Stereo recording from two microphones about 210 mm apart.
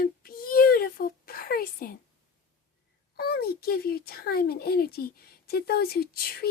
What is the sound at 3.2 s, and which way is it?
A child's voice, 50° left (ahead or behind).